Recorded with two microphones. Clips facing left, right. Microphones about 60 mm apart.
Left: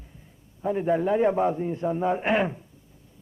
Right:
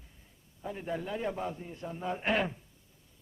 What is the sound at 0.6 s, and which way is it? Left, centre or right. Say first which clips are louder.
A man's voice: left 13 dB; left.